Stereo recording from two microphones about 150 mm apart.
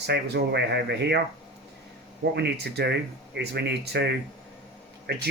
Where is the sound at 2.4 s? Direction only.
90° right.